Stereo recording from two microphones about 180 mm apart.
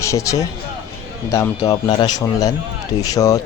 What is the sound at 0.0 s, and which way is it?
A man's voice, 15° left (ahead or behind).